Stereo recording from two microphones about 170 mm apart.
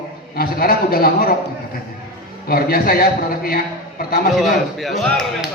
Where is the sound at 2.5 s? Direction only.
60° left (ahead or behind).